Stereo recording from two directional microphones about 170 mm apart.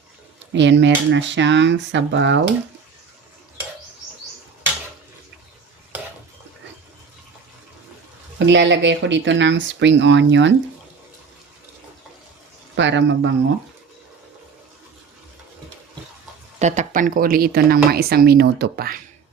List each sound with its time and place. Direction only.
0.5 s speech: 90° right
8.4 s speech: 90° right
12.7 s speech: 90° right
16.6 s speech: 45° right (ahead or behind); by 18.9 s 65° right (ahead or behind)